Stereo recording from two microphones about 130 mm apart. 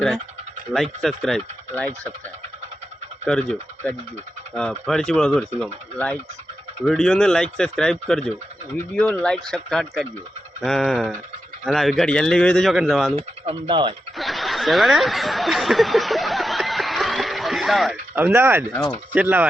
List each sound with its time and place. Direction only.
0.7 s speech: centre (ahead or behind)
3.2 s speech: 5° left (ahead or behind)
6.8 s speech: 5° left (ahead or behind)
13.1 s speech: 50° right (ahead or behind)
14.2 s snicker: centre (ahead or behind)
18.1 s speech: 15° right (ahead or behind)